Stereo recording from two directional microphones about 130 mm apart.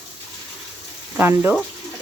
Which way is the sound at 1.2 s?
15° right (ahead or behind).